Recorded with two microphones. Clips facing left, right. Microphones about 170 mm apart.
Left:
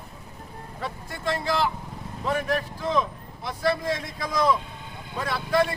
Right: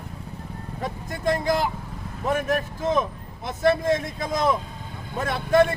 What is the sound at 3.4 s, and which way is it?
A man's voice, 50° right (ahead or behind).